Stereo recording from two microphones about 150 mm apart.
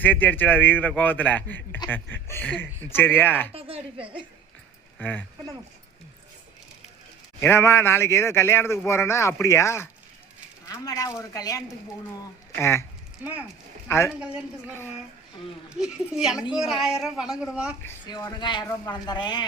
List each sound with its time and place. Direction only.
0.0 s speech: 10° left (ahead or behind)
3.5 s a woman's voice: 40° right (ahead or behind)
4.9 s speech: 10° left (ahead or behind)
7.3 s a man's voice: 15° left (ahead or behind)
13.8 s speech: 15° left (ahead or behind)
15.7 s a woman's voice: 5° right (ahead or behind)
18.0 s a man's voice: 25° left (ahead or behind)